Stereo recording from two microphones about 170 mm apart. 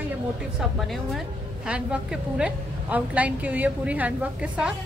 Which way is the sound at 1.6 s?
5° right (ahead or behind).